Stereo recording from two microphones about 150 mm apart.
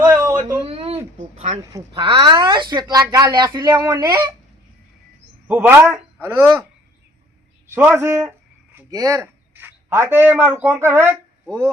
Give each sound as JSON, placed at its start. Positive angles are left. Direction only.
{"t": 0.0, "sound": "a sound", "side_deg": -20}
{"t": 0.7, "sound": "a sound", "side_deg": -40}
{"t": 2.0, "sound": "speech", "side_deg": -35}
{"t": 5.5, "sound": "a man's voice", "side_deg": -10}
{"t": 7.7, "sound": "a man's voice", "side_deg": -15}
{"t": 9.2, "sound": "speech", "side_deg": -15}